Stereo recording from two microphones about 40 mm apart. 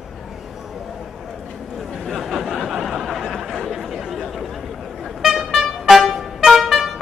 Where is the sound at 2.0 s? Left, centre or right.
Centre.